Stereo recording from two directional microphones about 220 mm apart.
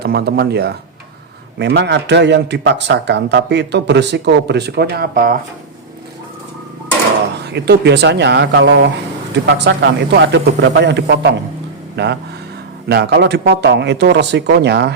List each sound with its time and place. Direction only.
0.0 s a man's voice: 45° right (ahead or behind)
7.5 s a man's voice: 50° right (ahead or behind)